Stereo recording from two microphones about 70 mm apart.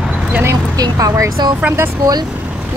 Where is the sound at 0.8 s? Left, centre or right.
Right.